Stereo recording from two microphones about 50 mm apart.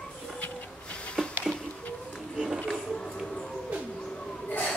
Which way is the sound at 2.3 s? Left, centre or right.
Centre.